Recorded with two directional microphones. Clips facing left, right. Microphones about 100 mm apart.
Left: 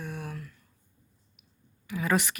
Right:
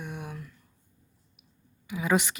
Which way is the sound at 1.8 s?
15° right (ahead or behind).